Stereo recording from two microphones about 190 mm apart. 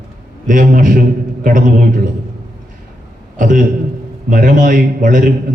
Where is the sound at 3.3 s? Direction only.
45° right (ahead or behind).